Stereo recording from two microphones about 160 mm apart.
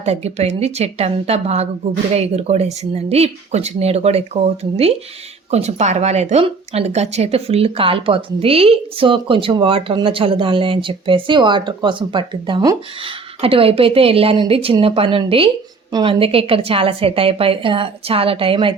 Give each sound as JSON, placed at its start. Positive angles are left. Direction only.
{"t": 0.0, "sound": "speech", "side_deg": -45}
{"t": 5.5, "sound": "speech", "side_deg": -45}